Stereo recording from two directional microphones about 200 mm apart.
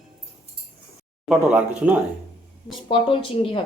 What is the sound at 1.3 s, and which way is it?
Speech, 5° right (ahead or behind).